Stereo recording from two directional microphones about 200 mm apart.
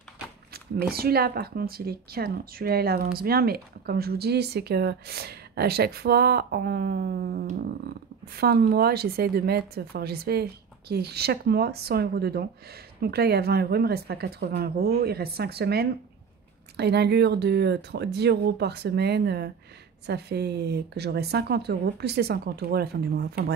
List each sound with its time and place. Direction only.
0.5 s speech: 50° right (ahead or behind)